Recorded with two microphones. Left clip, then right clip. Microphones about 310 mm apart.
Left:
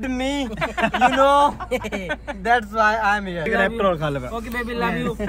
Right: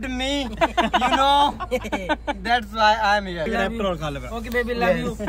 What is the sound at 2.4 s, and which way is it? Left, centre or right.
A man's voice, centre.